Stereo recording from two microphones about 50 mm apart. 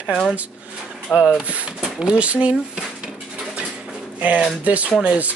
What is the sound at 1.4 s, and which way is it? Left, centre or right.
Speech, right.